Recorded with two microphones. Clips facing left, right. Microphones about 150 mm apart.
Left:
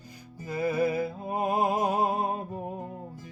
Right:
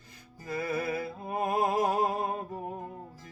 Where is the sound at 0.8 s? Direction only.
15° left (ahead or behind).